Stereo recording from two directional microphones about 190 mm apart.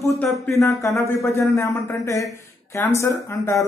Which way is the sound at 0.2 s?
15° left (ahead or behind).